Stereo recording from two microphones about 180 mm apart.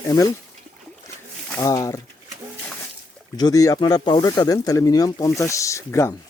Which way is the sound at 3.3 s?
20° left (ahead or behind).